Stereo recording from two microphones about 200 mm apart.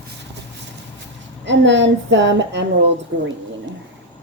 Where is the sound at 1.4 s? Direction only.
65° right (ahead or behind).